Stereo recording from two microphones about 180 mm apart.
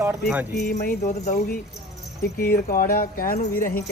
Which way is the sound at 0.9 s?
45° left (ahead or behind).